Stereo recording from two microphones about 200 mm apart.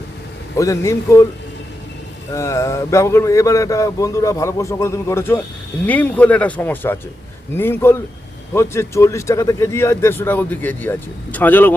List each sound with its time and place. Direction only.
0.5 s speech: 15° left (ahead or behind)
2.3 s speech: 15° left (ahead or behind)